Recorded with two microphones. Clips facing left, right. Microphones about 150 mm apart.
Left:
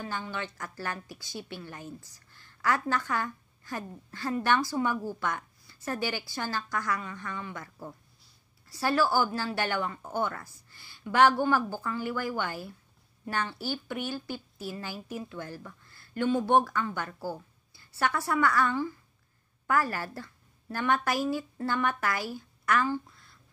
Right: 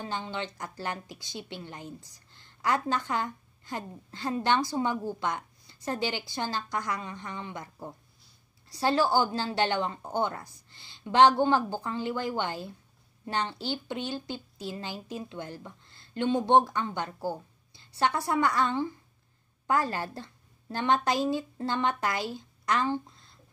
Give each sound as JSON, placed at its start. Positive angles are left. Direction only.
{"t": 0.0, "sound": "a woman's voice", "side_deg": -20}